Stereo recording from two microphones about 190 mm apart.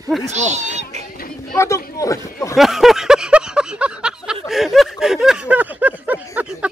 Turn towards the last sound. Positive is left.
turn(degrees=-10)  # may be behind; listen again after turning